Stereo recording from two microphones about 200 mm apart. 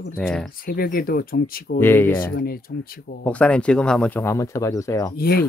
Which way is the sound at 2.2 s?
50° left (ahead or behind).